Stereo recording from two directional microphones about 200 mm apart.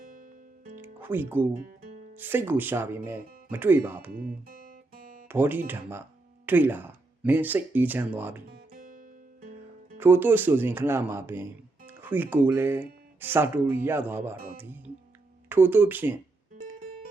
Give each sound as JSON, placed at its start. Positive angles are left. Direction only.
{"t": 0.1, "sound": "music", "side_deg": -40}
{"t": 0.8, "sound": "music", "side_deg": -10}
{"t": 2.1, "sound": "speech", "side_deg": -10}
{"t": 4.1, "sound": "speech", "side_deg": -50}
{"t": 4.9, "sound": "guitar", "side_deg": -45}
{"t": 5.3, "sound": "speech", "side_deg": -10}
{"t": 8.4, "sound": "music", "side_deg": -45}
{"t": 10.0, "sound": "speech", "side_deg": -10}